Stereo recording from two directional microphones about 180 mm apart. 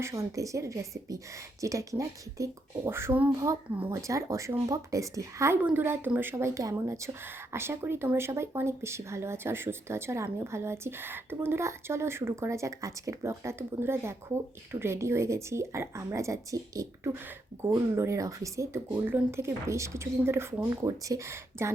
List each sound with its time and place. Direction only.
0.0 s speech: 15° right (ahead or behind)